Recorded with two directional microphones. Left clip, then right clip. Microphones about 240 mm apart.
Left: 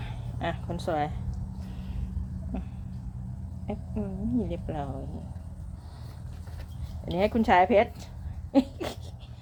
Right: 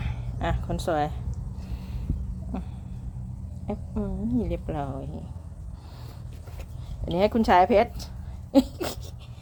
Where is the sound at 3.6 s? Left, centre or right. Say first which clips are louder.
Right 3 dB; centre.